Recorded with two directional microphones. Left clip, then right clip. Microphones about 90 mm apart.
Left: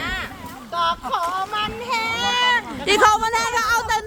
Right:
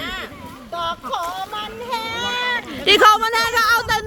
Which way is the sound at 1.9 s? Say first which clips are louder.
Left 1 dB; 10° left (ahead or behind).